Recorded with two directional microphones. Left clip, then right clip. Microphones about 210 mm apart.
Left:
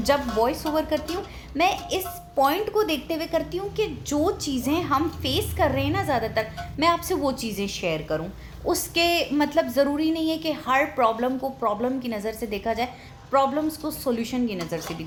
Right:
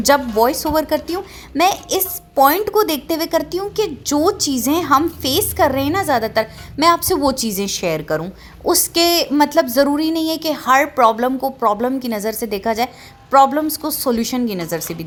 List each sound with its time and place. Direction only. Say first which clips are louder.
0.0 s a woman's voice: right 8 dB; 50° right (ahead or behind)